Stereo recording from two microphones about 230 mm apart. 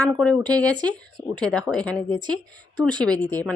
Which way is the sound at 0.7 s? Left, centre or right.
Centre.